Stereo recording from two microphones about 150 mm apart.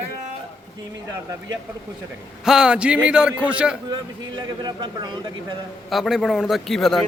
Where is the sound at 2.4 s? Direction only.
5° right (ahead or behind).